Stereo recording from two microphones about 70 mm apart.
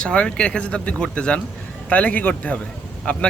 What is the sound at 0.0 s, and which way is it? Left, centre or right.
Speech, centre.